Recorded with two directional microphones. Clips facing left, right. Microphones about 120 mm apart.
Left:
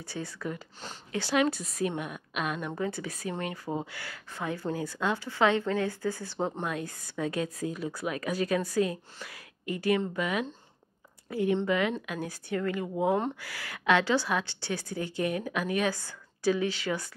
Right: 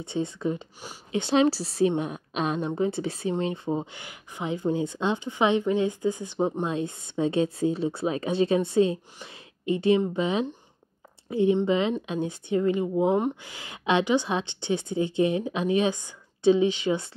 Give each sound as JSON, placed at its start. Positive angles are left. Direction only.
{"t": 0.0, "sound": "a woman's voice", "side_deg": -20}